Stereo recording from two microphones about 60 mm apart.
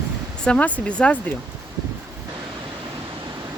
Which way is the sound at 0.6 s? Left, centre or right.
Centre.